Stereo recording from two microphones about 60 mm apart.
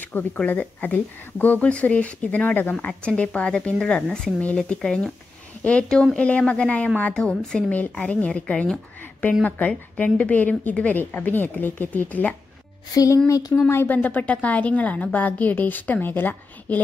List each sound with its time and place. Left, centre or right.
0.1 s a woman's voice: left
2.7 s a woman's voice: centre
12.9 s speech: left
13.6 s speech: left
14.0 s a woman's voice: left